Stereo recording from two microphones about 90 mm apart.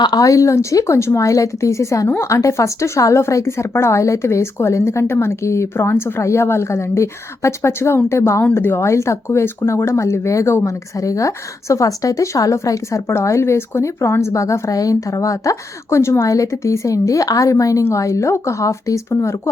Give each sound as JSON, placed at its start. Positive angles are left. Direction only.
{"t": 0.0, "sound": "speech", "side_deg": 45}